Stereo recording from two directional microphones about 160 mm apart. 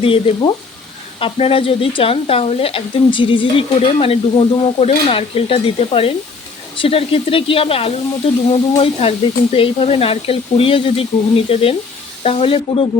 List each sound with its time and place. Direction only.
0.0 s speech: 35° left (ahead or behind)